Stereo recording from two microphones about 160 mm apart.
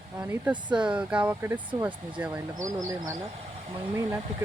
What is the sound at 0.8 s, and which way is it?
Speech, 5° right (ahead or behind).